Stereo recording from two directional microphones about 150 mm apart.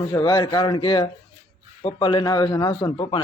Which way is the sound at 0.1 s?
30° left (ahead or behind).